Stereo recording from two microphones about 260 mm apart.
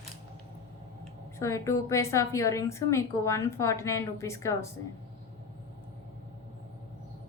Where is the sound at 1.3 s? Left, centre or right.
Centre.